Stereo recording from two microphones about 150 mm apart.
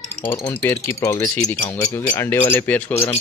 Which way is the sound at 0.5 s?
15° left (ahead or behind).